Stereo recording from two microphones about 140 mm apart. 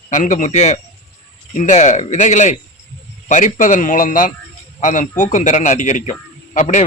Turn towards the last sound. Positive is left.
turn(degrees=60)  # may be behind; listen again after turning